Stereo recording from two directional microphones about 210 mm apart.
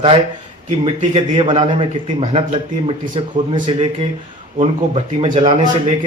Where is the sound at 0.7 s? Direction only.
30° right (ahead or behind).